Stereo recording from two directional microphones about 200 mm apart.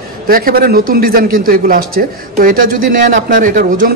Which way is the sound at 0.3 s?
50° right (ahead or behind).